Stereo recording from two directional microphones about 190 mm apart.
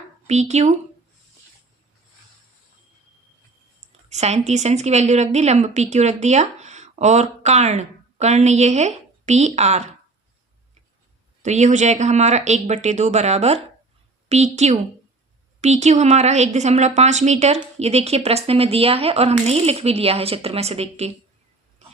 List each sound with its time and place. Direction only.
0.3 s a woman's voice: 35° right (ahead or behind)
4.1 s a woman's voice: 35° right (ahead or behind)
11.4 s a woman's voice: 40° right (ahead or behind)
21.8 s pig: 35° right (ahead or behind)